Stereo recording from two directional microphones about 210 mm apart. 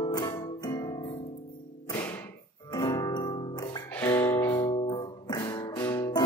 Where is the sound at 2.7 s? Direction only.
20° left (ahead or behind).